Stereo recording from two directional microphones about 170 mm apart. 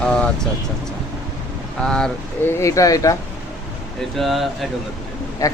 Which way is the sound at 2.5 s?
20° left (ahead or behind).